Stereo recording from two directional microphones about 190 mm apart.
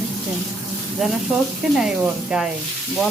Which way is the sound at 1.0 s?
Centre (ahead or behind).